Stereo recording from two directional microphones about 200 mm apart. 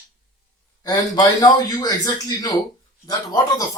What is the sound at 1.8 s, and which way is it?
Speech, 20° left (ahead or behind).